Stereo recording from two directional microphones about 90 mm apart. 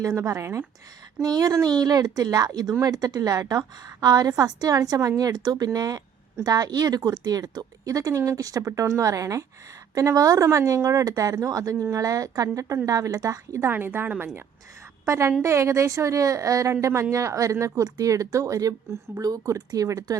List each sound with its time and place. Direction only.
0.2 s speech: 30° right (ahead or behind)
1.2 s a woman's voice: 45° right (ahead or behind)
13.7 s a woman's voice: 25° right (ahead or behind)
15.0 s a woman's voice: 35° right (ahead or behind)